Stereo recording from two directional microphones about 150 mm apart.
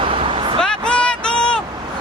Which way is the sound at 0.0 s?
35° right (ahead or behind).